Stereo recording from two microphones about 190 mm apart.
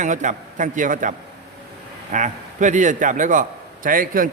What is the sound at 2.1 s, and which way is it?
A man's voice, 40° right (ahead or behind).